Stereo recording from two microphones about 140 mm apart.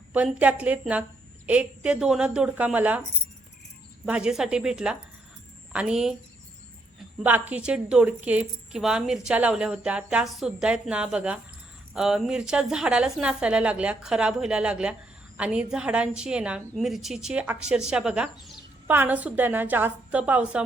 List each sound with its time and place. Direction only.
0.1 s a woman's voice: 10° right (ahead or behind)
4.0 s a woman's voice: 5° right (ahead or behind)
7.2 s a woman's voice: 10° right (ahead or behind)